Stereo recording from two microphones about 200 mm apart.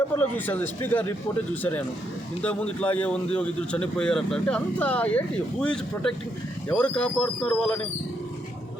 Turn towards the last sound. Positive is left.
turn(degrees=5)  # may be behind; listen again after turning